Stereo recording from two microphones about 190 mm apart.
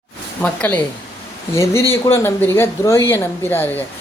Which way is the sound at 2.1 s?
15° left (ahead or behind).